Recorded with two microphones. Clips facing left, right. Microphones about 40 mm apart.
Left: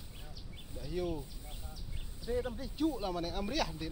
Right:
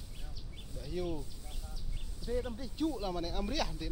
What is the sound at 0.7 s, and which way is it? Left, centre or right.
Speech, centre.